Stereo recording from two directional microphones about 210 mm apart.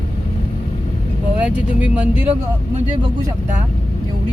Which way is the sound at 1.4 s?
5° right (ahead or behind).